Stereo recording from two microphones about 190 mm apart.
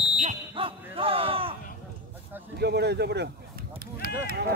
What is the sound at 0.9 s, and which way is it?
Speech, 30° right (ahead or behind).